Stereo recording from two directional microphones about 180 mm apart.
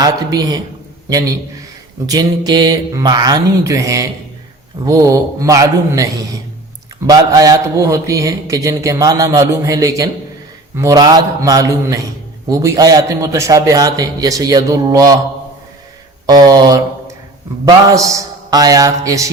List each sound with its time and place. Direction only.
0.0 s a man's voice: 20° right (ahead or behind)
16.2 s a man's voice: 20° right (ahead or behind)